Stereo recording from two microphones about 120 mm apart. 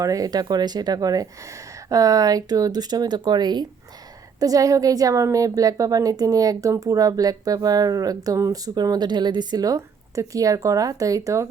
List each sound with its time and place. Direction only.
0.0 s a woman's voice: 30° right (ahead or behind)